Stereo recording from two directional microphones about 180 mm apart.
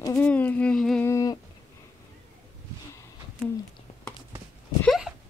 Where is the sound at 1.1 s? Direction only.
20° left (ahead or behind).